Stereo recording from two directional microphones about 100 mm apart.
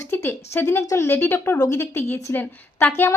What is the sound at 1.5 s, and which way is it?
Speech, 40° left (ahead or behind).